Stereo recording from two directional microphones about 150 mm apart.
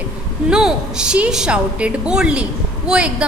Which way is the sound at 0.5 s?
5° right (ahead or behind).